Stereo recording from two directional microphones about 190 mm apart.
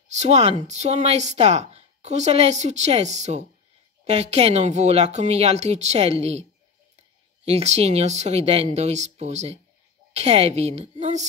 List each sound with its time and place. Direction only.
0.1 s speech: 35° right (ahead or behind)
7.4 s speech: 35° right (ahead or behind)